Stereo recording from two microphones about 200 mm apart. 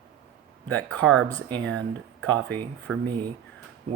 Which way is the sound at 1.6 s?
60° right (ahead or behind).